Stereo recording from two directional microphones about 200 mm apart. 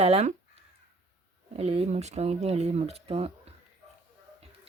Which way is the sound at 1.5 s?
30° right (ahead or behind).